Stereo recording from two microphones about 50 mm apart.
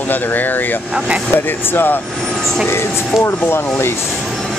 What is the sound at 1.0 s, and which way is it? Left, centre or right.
Speech, centre.